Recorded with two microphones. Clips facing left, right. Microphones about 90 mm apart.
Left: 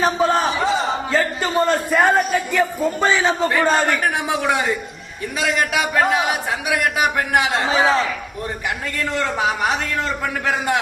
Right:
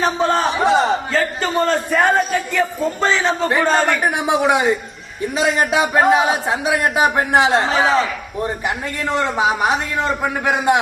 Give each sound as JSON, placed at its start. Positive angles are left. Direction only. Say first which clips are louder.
{"t": 0.0, "sound": "crowd", "louder": "even", "side_deg": 0}
{"t": 1.1, "sound": "a man's voice", "louder": "even", "side_deg": 5}
{"t": 3.8, "sound": "a man's voice", "louder": "right 2 dB", "side_deg": -20}
{"t": 7.7, "sound": "a man's voice", "louder": "right 1 dB", "side_deg": 0}
{"t": 9.0, "sound": "a man's voice", "louder": "right 3 dB", "side_deg": -20}